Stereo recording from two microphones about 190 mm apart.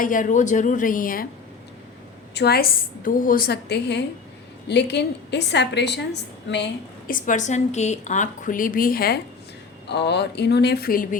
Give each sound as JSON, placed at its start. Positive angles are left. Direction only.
{"t": 0.0, "sound": "a woman's voice", "side_deg": 45}
{"t": 2.3, "sound": "a woman's voice", "side_deg": 60}
{"t": 7.1, "sound": "a woman's voice", "side_deg": 40}